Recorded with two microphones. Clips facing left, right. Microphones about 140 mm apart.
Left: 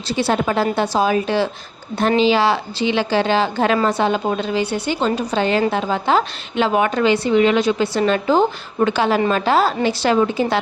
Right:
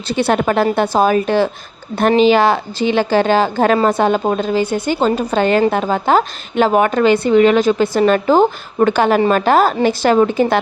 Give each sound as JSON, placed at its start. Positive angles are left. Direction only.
{"t": 0.1, "sound": "a woman's voice", "side_deg": -55}